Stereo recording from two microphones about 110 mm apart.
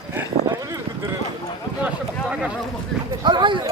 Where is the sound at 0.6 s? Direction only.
30° right (ahead or behind).